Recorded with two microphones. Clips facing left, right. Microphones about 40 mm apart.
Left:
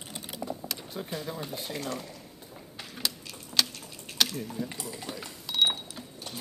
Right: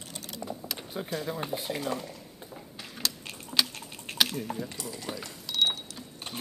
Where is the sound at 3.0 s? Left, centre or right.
Centre.